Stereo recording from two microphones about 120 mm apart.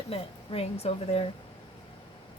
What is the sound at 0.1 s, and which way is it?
A woman's voice, 55° left (ahead or behind).